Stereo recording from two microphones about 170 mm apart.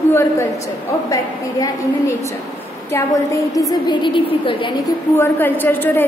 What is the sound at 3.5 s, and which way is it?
A woman's voice, 20° left (ahead or behind).